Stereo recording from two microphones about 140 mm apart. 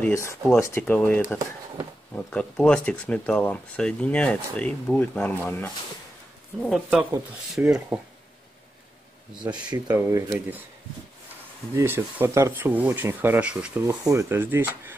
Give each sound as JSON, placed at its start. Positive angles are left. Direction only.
{"t": 0.1, "sound": "speech", "side_deg": 20}
{"t": 0.8, "sound": "speech", "side_deg": 10}
{"t": 6.6, "sound": "speech", "side_deg": 0}
{"t": 7.6, "sound": "speech", "side_deg": -10}
{"t": 9.4, "sound": "speech", "side_deg": -30}
{"t": 9.8, "sound": "speech", "side_deg": -20}
{"t": 11.7, "sound": "speech", "side_deg": -15}
{"t": 13.8, "sound": "speech", "side_deg": -20}